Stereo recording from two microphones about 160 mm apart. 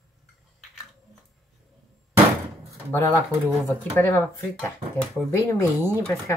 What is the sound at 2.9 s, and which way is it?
Speech, 15° left (ahead or behind).